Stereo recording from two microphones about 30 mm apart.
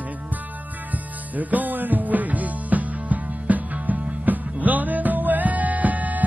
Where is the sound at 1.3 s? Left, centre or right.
Right.